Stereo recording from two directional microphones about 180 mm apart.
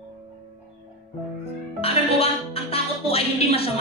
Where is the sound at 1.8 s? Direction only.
35° left (ahead or behind).